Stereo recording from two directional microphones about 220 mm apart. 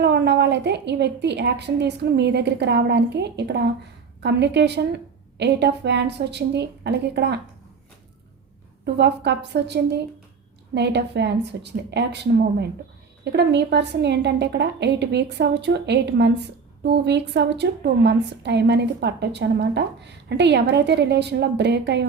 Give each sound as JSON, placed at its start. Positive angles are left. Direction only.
{"t": 0.0, "sound": "a woman's voice", "side_deg": -50}
{"t": 9.0, "sound": "a woman's voice", "side_deg": -50}